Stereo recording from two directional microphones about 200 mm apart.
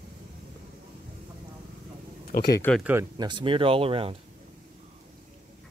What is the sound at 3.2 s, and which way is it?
Speech, 25° right (ahead or behind).